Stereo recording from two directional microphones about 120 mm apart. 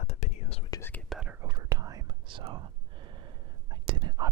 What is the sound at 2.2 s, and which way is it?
Whispering, 45° right (ahead or behind).